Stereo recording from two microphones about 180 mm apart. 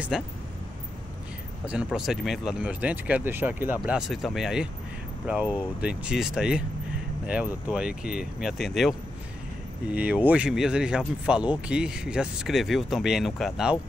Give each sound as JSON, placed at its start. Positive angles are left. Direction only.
{"t": 0.1, "sound": "speech", "side_deg": -5}
{"t": 1.7, "sound": "speech", "side_deg": -5}